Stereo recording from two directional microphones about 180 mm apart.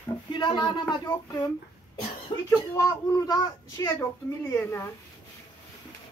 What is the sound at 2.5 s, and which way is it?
Speech, 20° left (ahead or behind).